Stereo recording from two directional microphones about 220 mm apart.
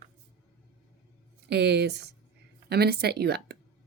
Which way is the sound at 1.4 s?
50° right (ahead or behind).